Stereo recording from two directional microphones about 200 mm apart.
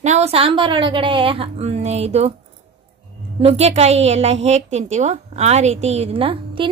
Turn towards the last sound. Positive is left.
turn(degrees=-30)  # may be behind; listen again after turning